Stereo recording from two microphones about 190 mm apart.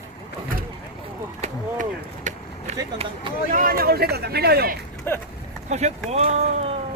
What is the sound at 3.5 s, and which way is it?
Speech, 50° right (ahead or behind).